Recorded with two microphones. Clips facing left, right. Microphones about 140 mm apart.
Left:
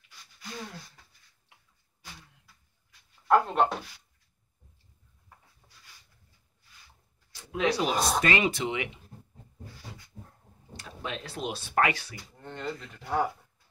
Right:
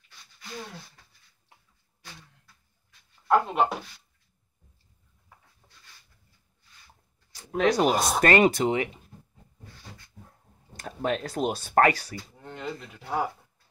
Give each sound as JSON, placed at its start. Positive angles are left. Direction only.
{"t": 3.3, "sound": "speech", "side_deg": -5}
{"t": 5.6, "sound": "a sound", "side_deg": -5}
{"t": 7.5, "sound": "speech", "side_deg": -45}
{"t": 10.8, "sound": "speech", "side_deg": -50}
{"t": 12.4, "sound": "speech", "side_deg": -5}